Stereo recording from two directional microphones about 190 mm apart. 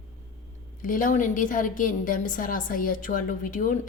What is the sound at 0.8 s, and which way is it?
A woman's voice, 45° left (ahead or behind).